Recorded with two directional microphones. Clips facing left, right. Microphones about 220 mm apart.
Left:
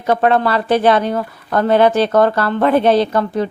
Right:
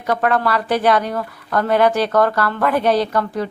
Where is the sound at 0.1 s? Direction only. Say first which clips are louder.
Left 4 dB; 25° left (ahead or behind).